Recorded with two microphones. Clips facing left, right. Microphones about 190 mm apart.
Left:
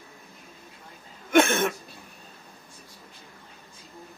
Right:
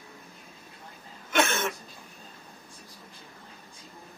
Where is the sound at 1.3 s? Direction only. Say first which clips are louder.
Left 6 dB; 55° left (ahead or behind).